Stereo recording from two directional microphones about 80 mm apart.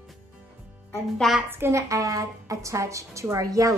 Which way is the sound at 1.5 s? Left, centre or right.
Right.